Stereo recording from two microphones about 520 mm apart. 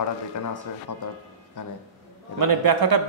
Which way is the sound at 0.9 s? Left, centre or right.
Left.